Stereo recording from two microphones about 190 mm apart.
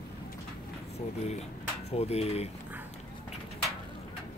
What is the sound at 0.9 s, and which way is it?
Speech, 35° left (ahead or behind).